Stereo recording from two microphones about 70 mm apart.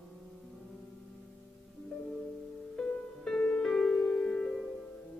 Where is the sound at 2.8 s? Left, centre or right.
Centre.